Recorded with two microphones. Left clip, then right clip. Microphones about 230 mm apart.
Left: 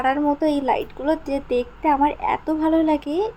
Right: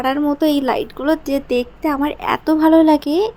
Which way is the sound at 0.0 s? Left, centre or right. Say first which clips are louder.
Right 2 dB; centre.